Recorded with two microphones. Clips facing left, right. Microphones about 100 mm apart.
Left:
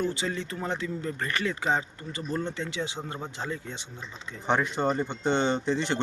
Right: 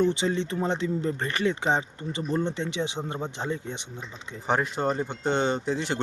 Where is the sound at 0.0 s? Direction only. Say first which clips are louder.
Right 6 dB; 25° right (ahead or behind).